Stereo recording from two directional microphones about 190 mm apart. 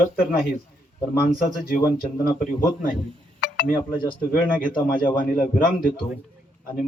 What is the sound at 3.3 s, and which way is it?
Speech, 65° left (ahead or behind).